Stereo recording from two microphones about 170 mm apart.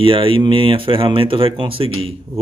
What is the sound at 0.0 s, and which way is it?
Speech, 30° right (ahead or behind).